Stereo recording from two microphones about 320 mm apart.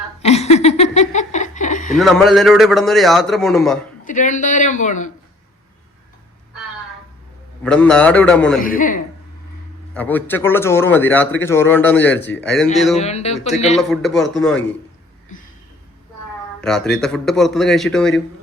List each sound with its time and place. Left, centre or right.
0.2 s laughter: centre
0.5 s a sound: centre
2.0 s a man's voice: centre
4.0 s a man's voice: left
7.6 s a man's voice: centre
8.6 s a man's voice: left
9.9 s a man's voice: centre
13.0 s a man's voice: centre
13.7 s a man's voice: centre
16.6 s a man's voice: centre